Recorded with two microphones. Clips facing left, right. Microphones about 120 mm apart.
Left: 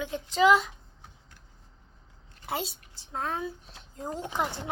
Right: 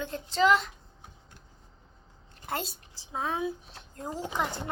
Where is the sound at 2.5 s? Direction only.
Centre (ahead or behind).